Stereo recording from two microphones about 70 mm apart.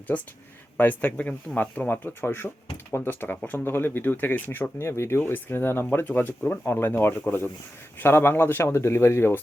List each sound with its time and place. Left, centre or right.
0.1 s speech: left
2.0 s speech: left